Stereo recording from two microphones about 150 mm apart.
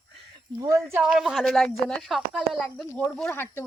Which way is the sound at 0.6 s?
20° right (ahead or behind).